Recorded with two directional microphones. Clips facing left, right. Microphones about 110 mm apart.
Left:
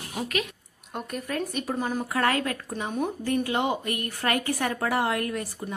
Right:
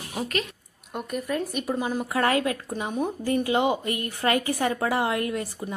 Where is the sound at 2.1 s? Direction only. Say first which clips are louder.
Right 3 dB; 20° right (ahead or behind).